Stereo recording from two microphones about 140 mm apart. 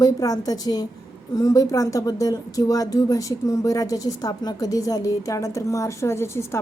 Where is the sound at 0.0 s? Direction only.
25° left (ahead or behind).